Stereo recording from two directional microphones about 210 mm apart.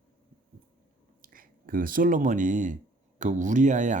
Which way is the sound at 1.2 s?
40° right (ahead or behind).